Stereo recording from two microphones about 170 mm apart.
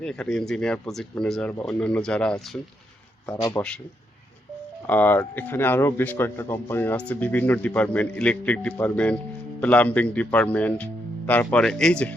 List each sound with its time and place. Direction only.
0.0 s speech: 5° left (ahead or behind)
3.6 s a man's voice: 20° left (ahead or behind)
4.9 s speech: 10° left (ahead or behind)